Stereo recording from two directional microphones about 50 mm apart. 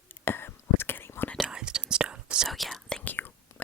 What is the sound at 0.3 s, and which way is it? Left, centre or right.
Whispering, left.